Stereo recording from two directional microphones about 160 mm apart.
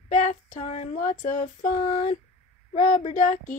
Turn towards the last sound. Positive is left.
turn(degrees=50)  # may be behind; listen again after turning